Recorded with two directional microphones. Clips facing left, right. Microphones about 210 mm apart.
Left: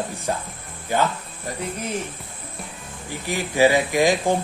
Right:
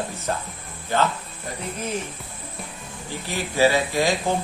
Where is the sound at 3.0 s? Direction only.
15° left (ahead or behind).